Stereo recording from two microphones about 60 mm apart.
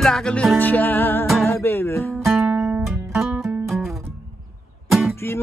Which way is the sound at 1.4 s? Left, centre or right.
Left.